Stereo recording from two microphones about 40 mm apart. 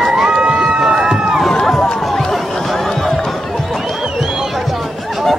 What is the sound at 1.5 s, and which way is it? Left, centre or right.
Run, centre.